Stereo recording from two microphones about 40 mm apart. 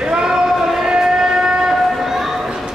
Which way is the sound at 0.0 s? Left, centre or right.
Centre.